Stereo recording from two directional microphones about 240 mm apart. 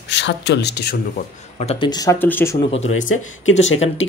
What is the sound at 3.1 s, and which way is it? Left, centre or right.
Speech, left.